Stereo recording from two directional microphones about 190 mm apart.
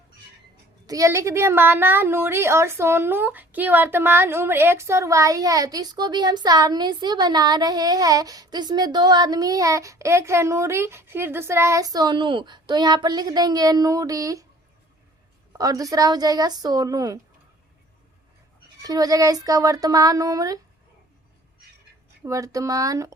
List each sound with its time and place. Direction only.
0.9 s a woman's voice: 15° right (ahead or behind)
15.5 s speech: 20° right (ahead or behind)
18.8 s speech: 20° right (ahead or behind)
22.2 s a woman's voice: 15° right (ahead or behind)